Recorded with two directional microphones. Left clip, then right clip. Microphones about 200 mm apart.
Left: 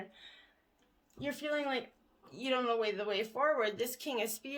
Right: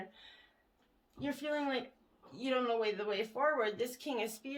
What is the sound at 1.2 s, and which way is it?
Speech, 40° left (ahead or behind).